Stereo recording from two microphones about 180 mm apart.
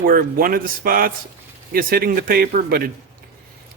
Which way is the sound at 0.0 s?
55° right (ahead or behind).